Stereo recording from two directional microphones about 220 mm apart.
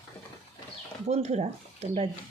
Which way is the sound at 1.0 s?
30° right (ahead or behind).